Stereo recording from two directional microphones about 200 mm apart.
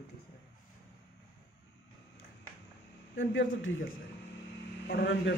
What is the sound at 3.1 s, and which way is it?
Speech, 70° left (ahead or behind).